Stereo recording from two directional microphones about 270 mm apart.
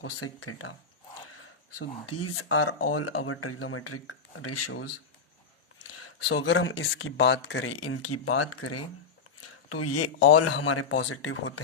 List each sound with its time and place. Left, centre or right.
0.0 s speech: left
1.8 s speech: left
5.9 s speech: left